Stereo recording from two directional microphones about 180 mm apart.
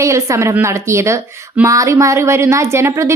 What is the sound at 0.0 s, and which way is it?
A woman's voice, 15° right (ahead or behind).